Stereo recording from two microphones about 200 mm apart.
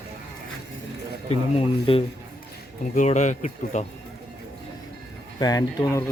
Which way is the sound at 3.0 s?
35° left (ahead or behind).